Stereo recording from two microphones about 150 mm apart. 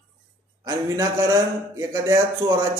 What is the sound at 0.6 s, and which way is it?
A man's voice, 20° right (ahead or behind).